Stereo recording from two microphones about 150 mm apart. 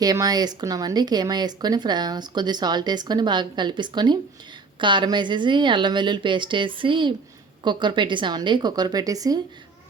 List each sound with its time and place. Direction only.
0.0 s a woman's voice: 25° right (ahead or behind)